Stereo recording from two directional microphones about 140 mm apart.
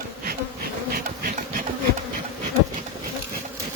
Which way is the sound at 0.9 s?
90° right.